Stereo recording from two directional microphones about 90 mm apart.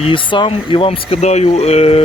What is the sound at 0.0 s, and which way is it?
Speech, 70° left (ahead or behind).